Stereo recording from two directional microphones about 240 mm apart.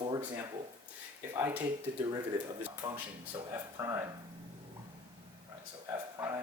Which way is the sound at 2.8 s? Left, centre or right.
Centre.